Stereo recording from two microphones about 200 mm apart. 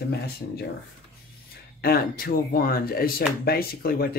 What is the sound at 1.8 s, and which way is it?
Speech, 45° left (ahead or behind).